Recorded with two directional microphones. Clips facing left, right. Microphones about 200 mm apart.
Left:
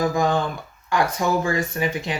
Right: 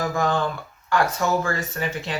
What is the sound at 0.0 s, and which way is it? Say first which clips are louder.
Speech: left 2 dB; 15° left (ahead or behind).